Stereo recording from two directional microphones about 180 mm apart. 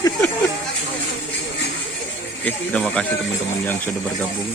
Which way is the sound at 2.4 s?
5° left (ahead or behind).